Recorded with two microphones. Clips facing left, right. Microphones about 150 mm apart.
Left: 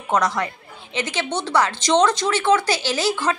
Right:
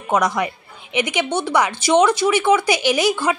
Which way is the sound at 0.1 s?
15° right (ahead or behind).